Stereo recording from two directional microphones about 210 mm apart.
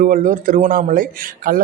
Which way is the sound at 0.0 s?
40° right (ahead or behind).